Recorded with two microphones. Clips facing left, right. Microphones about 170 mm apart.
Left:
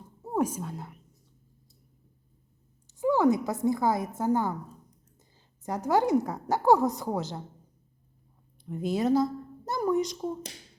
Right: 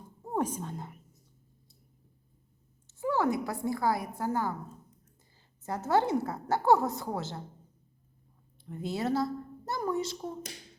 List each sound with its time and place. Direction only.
0.3 s speech: 10° left (ahead or behind)
2.8 s a woman's voice: 15° left (ahead or behind)
5.6 s a woman's voice: 15° left (ahead or behind)
8.6 s a woman's voice: 15° left (ahead or behind)